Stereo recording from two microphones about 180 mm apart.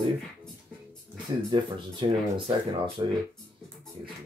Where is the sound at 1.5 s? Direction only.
25° right (ahead or behind).